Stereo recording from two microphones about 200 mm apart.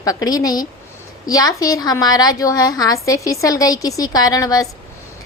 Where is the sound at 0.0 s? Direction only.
20° left (ahead or behind).